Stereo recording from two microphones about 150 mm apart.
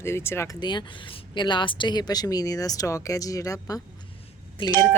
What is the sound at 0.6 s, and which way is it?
Speech, 30° left (ahead or behind).